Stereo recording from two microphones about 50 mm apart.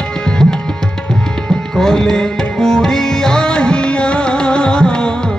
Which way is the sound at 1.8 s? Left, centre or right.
Centre.